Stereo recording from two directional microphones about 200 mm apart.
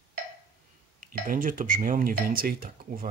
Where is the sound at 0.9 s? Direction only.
40° right (ahead or behind).